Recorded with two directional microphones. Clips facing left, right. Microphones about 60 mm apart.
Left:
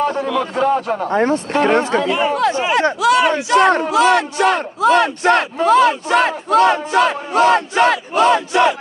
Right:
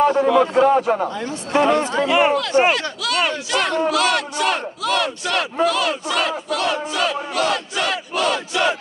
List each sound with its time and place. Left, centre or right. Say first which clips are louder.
0.1 s speech: right 4 dB; right
0.6 s speech: right 2 dB; centre
1.1 s speech: left 5 dB; left
2.0 s speech: right 1 dB; right
2.7 s battle cry: left 8 dB; left